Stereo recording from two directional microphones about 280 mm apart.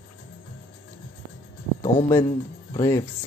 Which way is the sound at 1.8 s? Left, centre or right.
Left.